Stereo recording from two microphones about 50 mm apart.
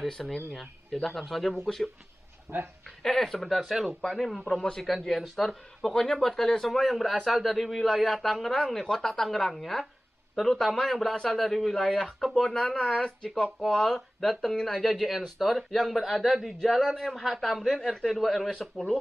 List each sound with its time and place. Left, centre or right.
0.0 s speech: centre
2.5 s speech: right
3.0 s speech: centre
4.5 s speech: centre
13.3 s speech: centre